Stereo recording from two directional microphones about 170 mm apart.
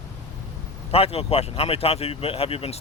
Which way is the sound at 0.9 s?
35° left (ahead or behind).